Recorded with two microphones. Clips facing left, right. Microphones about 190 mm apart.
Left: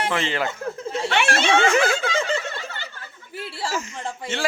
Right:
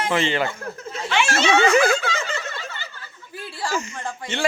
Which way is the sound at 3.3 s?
25° left (ahead or behind).